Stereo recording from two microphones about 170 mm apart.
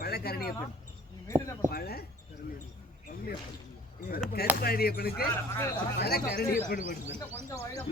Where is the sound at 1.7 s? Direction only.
65° left (ahead or behind).